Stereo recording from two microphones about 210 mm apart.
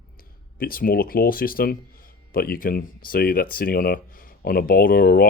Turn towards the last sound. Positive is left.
turn(degrees=45)  # may be behind; listen again after turning